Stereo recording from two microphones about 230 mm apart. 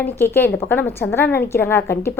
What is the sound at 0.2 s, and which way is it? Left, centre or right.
A woman's voice, centre.